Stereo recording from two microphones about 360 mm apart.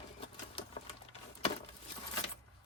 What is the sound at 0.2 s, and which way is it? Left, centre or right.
Sewing machine, centre.